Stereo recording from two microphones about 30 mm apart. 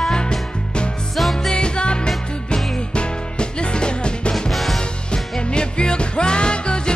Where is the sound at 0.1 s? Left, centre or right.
Left.